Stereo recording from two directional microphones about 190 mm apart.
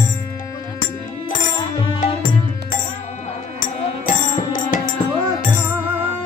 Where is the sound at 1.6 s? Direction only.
25° left (ahead or behind).